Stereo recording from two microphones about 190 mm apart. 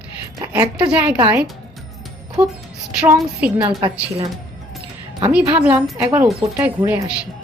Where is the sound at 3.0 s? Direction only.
5° right (ahead or behind).